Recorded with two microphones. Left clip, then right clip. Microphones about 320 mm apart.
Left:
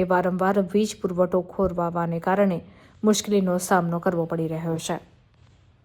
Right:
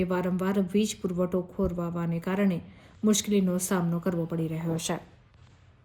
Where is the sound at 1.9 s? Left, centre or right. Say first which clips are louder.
Left 9 dB; centre.